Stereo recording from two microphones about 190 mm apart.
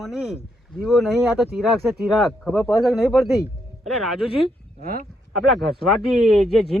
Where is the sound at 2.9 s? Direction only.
Centre (ahead or behind).